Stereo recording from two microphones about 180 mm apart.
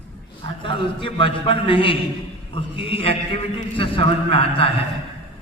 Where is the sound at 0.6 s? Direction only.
30° left (ahead or behind).